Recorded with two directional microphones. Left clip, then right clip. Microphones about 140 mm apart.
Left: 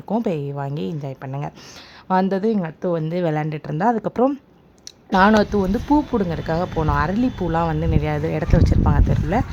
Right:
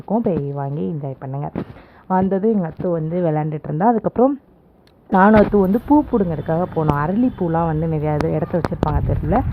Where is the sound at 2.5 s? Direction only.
25° left (ahead or behind).